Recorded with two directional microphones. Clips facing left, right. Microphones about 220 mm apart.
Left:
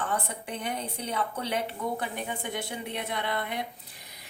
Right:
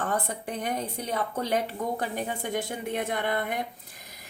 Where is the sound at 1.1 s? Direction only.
45° right (ahead or behind).